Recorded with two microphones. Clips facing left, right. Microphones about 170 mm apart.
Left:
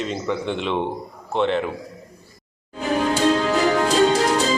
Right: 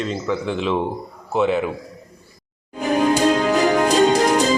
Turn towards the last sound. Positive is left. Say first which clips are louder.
# right 2 dB
turn(degrees=-15)  # may be behind; listen again after turning